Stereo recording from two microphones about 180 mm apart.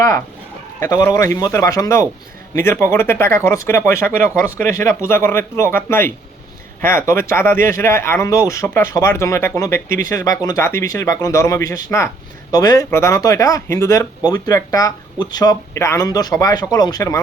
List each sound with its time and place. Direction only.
0.8 s speech: 20° left (ahead or behind)